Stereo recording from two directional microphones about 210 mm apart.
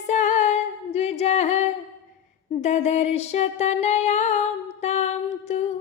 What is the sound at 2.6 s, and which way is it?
Music, 30° left (ahead or behind).